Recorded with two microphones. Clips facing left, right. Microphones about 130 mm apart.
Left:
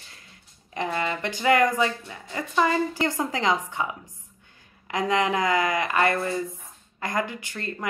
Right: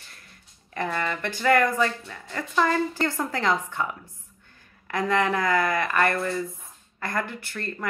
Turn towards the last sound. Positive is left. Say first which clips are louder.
# even
turn(degrees=15)  # may be behind; listen again after turning